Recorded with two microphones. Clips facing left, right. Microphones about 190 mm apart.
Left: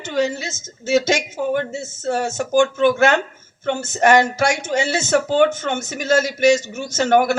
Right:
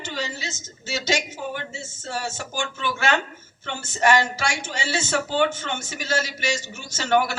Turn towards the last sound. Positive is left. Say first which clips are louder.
# left 6 dB
turn(degrees=50)  # may be behind; listen again after turning